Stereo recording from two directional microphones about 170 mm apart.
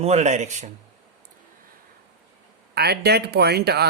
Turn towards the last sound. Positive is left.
turn(degrees=-70)  # may be behind; listen again after turning